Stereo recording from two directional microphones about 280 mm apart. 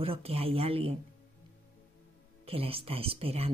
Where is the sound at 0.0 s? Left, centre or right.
Centre.